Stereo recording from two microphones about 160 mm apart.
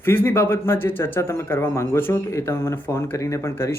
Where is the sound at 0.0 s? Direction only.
15° left (ahead or behind).